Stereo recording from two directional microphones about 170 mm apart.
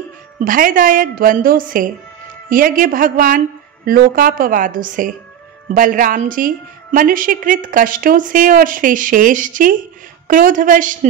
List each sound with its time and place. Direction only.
0.5 s a woman's voice: 55° right (ahead or behind)